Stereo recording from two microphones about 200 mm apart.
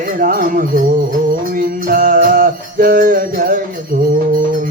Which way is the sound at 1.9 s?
45° right (ahead or behind).